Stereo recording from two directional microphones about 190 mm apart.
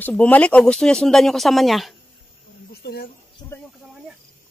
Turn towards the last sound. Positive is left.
turn(degrees=55)  # may be behind; listen again after turning